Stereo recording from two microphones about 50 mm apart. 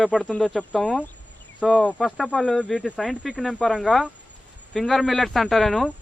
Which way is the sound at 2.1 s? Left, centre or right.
Centre.